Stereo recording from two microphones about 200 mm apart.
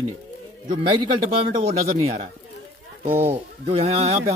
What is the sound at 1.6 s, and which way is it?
Speech, 30° right (ahead or behind).